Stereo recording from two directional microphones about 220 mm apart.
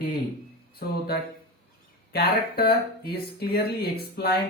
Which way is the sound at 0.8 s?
45° left (ahead or behind).